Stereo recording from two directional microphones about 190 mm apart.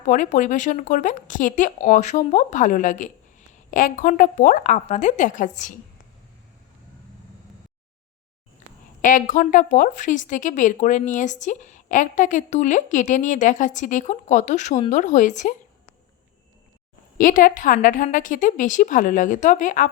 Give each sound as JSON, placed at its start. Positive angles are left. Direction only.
{"t": 0.0, "sound": "a woman's voice", "side_deg": 40}
{"t": 9.0, "sound": "a woman's voice", "side_deg": 45}
{"t": 17.2, "sound": "a woman's voice", "side_deg": 45}